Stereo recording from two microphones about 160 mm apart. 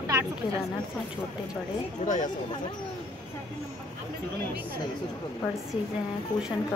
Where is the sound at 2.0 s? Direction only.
50° left (ahead or behind).